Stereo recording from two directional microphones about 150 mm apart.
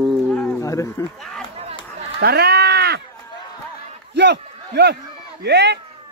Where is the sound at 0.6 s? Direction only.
20° left (ahead or behind).